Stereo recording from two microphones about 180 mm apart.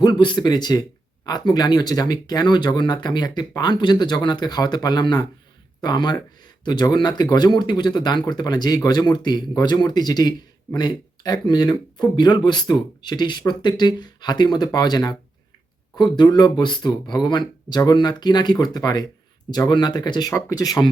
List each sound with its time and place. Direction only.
0.0 s speech: 25° left (ahead or behind)